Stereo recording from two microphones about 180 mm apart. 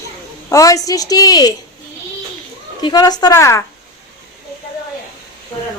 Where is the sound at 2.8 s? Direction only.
20° left (ahead or behind).